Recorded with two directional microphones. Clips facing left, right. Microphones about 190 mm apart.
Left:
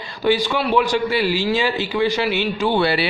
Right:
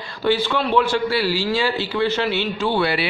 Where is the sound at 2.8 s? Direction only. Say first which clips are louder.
Left 2 dB; 30° left (ahead or behind).